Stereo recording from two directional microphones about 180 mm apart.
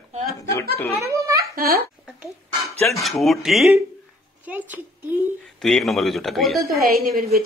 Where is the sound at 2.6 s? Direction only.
15° left (ahead or behind).